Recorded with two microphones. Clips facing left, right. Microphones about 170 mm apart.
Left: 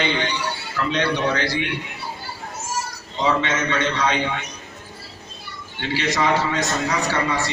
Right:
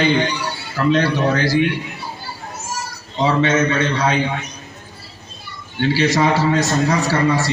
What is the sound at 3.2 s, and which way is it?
Speech, 40° right (ahead or behind).